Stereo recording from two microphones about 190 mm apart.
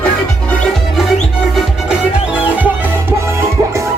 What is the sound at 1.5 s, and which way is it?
Music, 5° right (ahead or behind).